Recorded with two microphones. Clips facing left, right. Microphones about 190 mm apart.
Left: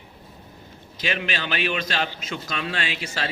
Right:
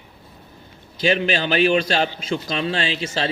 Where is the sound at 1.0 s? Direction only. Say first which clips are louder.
Right 8 dB; 35° right (ahead or behind).